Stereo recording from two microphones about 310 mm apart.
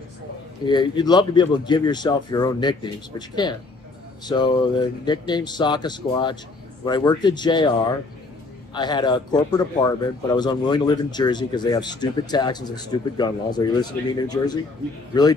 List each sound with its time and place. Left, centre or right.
0.7 s speech: centre